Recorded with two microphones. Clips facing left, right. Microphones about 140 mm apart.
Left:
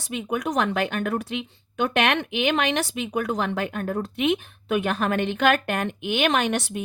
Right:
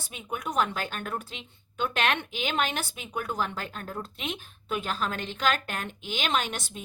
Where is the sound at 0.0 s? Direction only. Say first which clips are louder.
Left 8 dB; 80° left.